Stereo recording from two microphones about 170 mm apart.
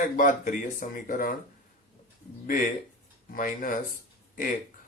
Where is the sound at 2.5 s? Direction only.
55° left (ahead or behind).